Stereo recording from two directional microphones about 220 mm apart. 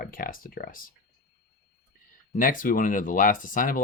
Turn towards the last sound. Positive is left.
turn(degrees=40)  # may be behind; listen again after turning